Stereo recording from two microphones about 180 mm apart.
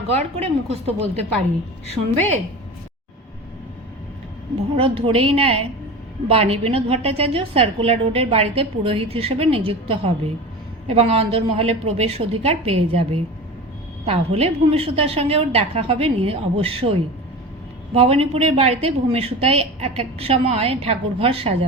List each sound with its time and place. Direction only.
0.1 s a woman's voice: 35° right (ahead or behind)
4.8 s a woman's voice: 30° right (ahead or behind)